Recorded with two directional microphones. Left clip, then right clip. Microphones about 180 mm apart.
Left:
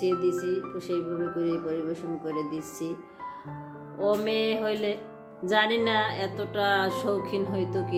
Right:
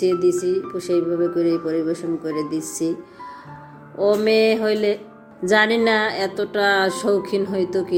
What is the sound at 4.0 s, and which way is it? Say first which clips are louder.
Speech: right 9 dB; 35° right (ahead or behind).